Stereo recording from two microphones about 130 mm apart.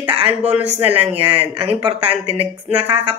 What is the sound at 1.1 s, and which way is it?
Speech, 40° right (ahead or behind).